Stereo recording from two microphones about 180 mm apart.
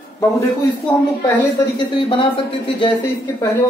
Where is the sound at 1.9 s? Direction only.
30° left (ahead or behind).